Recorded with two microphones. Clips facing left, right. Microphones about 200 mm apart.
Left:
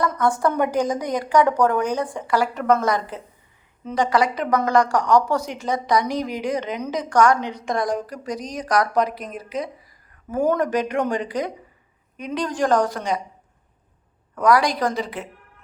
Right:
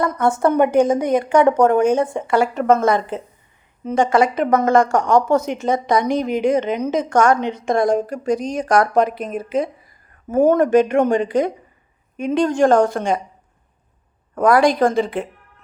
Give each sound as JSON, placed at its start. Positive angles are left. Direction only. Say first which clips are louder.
{"t": 0.0, "sound": "a woman's voice", "louder": "right 3 dB", "side_deg": -25}
{"t": 13.0, "sound": "a woman's voice", "louder": "right 5 dB", "side_deg": -50}
{"t": 14.3, "sound": "a woman's voice", "louder": "right 4 dB", "side_deg": -50}